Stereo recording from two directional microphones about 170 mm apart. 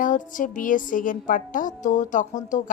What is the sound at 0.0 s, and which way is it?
Speech, 50° left (ahead or behind).